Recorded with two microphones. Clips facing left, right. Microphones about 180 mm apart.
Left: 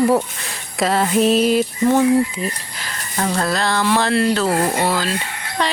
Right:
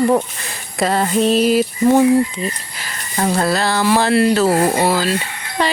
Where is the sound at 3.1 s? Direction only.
10° right (ahead or behind).